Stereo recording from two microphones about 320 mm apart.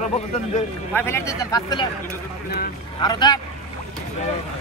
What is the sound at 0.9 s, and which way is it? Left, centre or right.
Speech, centre.